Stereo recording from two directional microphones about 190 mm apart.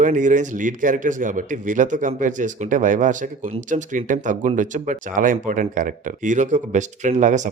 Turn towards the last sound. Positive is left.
turn(degrees=-40)  # may be behind; listen again after turning